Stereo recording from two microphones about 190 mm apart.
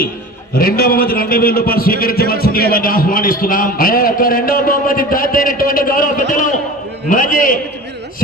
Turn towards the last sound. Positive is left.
turn(degrees=45)  # may be behind; listen again after turning